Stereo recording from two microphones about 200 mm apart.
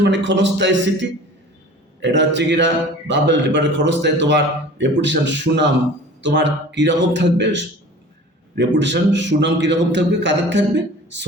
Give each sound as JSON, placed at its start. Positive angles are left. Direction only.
{"t": 0.0, "sound": "a man's voice", "side_deg": -60}